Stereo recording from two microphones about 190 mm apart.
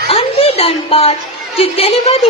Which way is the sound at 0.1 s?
30° left (ahead or behind).